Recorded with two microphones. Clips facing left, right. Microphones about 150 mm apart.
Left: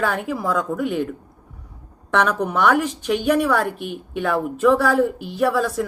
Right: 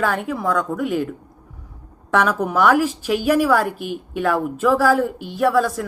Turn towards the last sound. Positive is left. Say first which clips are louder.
# right 2 dB
turn(degrees=0)  # may be behind; listen again after turning